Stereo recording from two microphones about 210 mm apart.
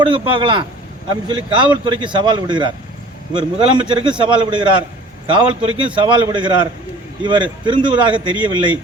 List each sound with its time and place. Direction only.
0.0 s speech: 25° right (ahead or behind)